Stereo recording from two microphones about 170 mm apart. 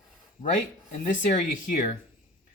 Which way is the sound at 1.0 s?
50° left (ahead or behind).